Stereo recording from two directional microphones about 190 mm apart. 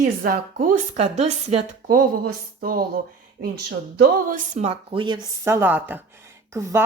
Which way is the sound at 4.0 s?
45° right (ahead or behind).